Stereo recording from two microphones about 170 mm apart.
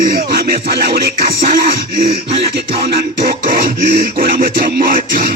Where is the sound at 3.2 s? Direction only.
65° right (ahead or behind).